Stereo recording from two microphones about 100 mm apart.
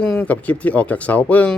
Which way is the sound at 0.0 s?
15° left (ahead or behind).